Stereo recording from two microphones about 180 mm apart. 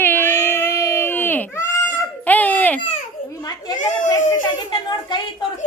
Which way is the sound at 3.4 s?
20° left (ahead or behind).